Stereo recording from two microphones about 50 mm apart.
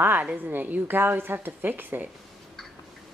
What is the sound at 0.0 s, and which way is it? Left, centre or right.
A woman's voice, right.